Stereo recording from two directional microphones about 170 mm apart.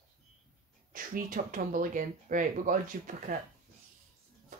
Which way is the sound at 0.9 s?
55° right (ahead or behind).